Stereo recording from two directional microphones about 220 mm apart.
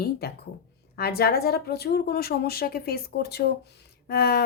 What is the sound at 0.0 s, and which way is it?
Speech, 45° left (ahead or behind).